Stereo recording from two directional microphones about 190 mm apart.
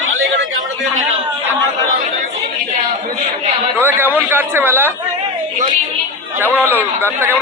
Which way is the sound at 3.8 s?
10° right (ahead or behind).